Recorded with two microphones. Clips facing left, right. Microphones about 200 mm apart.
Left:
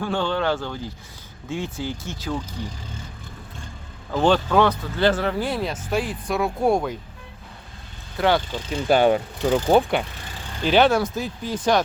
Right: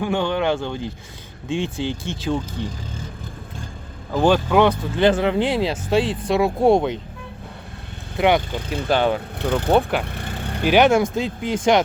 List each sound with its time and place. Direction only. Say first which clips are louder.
0.0 s speech: right 3 dB; 15° right (ahead or behind)
4.1 s speech: right 2 dB; 10° right (ahead or behind); by 7.0 s 25° right (ahead or behind)
8.2 s speech: right 3 dB; 15° right (ahead or behind)
8.9 s speech: left 2 dB; 10° left (ahead or behind)
9.4 s speech: even; 60° right (ahead or behind)
9.6 s speech: right 1 dB; centre (ahead or behind)
10.0 s vehicle: right 5 dB; 60° right (ahead or behind)
10.7 s speech: right 2 dB; 15° right (ahead or behind)